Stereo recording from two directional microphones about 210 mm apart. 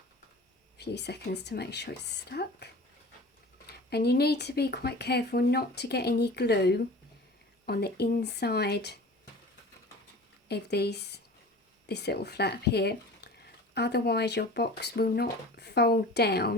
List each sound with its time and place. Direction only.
0.8 s speech: 50° left (ahead or behind)
3.7 s speech: 50° left (ahead or behind)
10.5 s speech: 50° left (ahead or behind)